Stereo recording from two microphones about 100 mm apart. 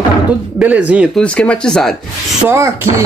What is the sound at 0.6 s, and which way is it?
Speech, 15° right (ahead or behind).